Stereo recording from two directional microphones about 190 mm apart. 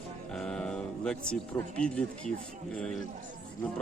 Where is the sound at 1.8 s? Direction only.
5° left (ahead or behind).